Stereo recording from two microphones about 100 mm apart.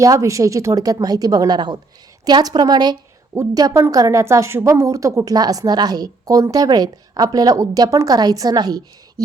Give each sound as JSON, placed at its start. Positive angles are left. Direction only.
{"t": 0.0, "sound": "a woman's voice", "side_deg": -30}